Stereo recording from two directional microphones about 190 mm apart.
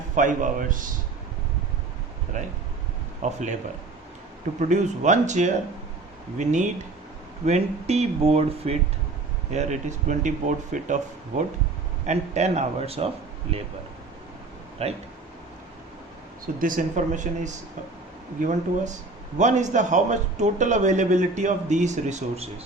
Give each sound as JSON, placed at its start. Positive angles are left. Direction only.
{"t": 0.2, "sound": "speech", "side_deg": -45}
{"t": 2.3, "sound": "a man's voice", "side_deg": -40}
{"t": 4.7, "sound": "a man's voice", "side_deg": -40}
{"t": 14.8, "sound": "a man's voice", "side_deg": -35}
{"t": 16.6, "sound": "speech", "side_deg": -45}
{"t": 19.4, "sound": "a man's voice", "side_deg": -40}